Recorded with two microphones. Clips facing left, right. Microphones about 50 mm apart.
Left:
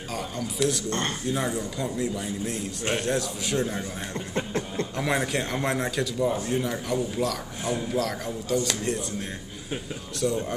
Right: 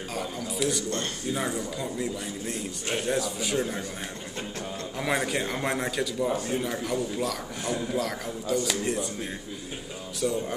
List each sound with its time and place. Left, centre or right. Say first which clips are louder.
0.1 s a man's voice: left 2 dB; centre
0.8 s speech: left 3 dB; left
1.3 s a man's voice: left 1 dB; centre
4.4 s a sound: left 7 dB; left
4.9 s a man's voice: even; centre
10.2 s a man's voice: left 1 dB; centre